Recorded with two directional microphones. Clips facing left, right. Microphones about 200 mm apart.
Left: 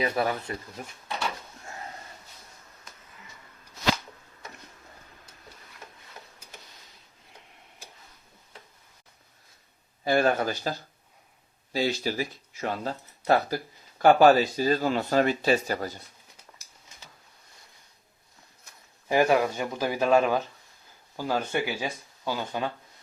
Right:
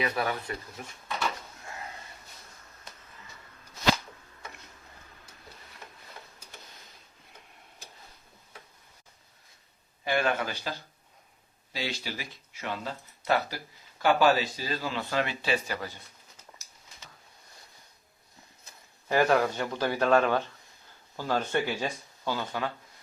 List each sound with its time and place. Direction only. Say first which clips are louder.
0.0 s speech: left 3 dB; 30° left (ahead or behind)
10.0 s speech: left 5 dB; 40° left (ahead or behind)
19.0 s speech: left 2 dB; 15° left (ahead or behind)